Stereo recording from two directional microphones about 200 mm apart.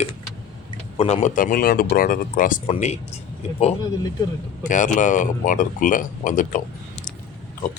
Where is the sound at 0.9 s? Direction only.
35° left (ahead or behind).